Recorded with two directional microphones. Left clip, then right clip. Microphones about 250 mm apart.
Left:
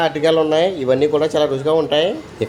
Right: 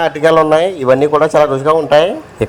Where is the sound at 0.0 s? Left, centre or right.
Right.